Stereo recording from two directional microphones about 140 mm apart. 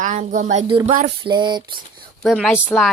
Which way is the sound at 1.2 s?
35° right (ahead or behind).